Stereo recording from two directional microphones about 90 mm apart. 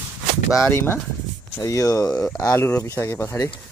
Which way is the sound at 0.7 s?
25° left (ahead or behind).